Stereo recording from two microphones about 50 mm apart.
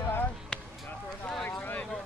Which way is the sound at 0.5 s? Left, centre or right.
Centre.